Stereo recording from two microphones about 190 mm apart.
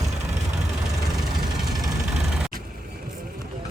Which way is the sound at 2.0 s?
5° right (ahead or behind).